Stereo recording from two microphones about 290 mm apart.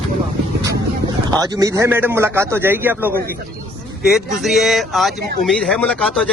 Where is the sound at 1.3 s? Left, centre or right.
Centre.